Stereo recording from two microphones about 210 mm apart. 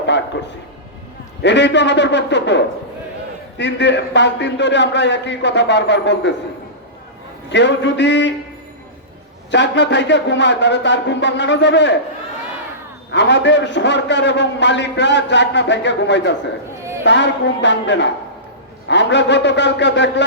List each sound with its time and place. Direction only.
1.4 s a man's voice: 55° left (ahead or behind)
3.6 s a man's voice: 55° left (ahead or behind)
7.5 s a man's voice: 55° left (ahead or behind)
9.5 s a man's voice: 55° left (ahead or behind)
13.1 s a man's voice: 55° left (ahead or behind)